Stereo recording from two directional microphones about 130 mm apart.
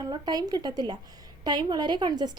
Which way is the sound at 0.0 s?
30° right (ahead or behind).